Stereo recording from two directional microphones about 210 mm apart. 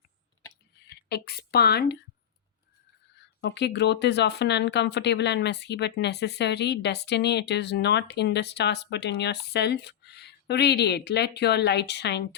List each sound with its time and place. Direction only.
1.0 s speech: 50° left (ahead or behind)
3.4 s speech: 55° left (ahead or behind)